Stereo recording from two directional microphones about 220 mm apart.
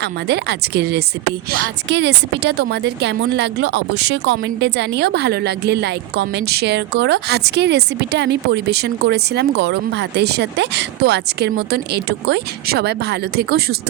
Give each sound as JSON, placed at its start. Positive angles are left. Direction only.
{"t": 0.0, "sound": "speech", "side_deg": -50}